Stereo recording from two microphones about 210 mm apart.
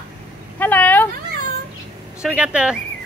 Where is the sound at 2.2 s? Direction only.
5° right (ahead or behind).